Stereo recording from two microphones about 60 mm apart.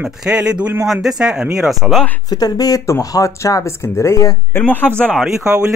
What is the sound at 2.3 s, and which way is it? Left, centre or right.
Speech, left.